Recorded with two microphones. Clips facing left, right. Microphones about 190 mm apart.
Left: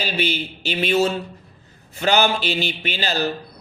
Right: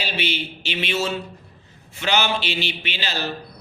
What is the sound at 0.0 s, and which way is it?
Speech, 40° left (ahead or behind).